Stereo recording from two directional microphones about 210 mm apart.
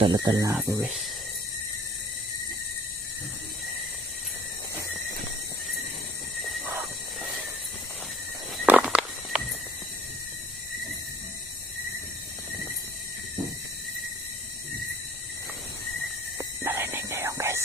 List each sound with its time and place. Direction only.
0.0 s speech: 20° right (ahead or behind)
6.7 s vehicle: 5° right (ahead or behind)
8.5 s a sound: 5° right (ahead or behind)
16.4 s whispering: 10° right (ahead or behind)